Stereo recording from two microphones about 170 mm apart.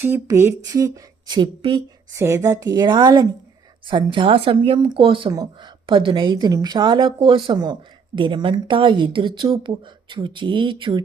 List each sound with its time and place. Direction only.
0.0 s a woman's voice: 15° right (ahead or behind)